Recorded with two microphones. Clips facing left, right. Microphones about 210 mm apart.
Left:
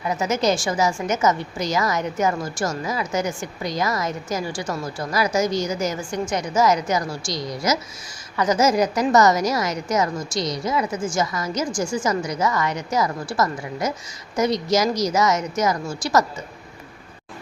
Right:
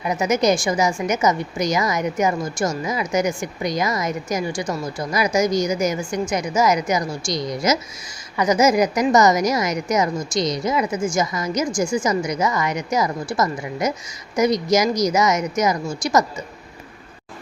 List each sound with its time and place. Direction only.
0.0 s a woman's voice: 15° right (ahead or behind)